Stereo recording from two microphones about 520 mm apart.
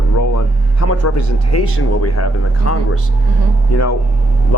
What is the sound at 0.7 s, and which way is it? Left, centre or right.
Speech, left.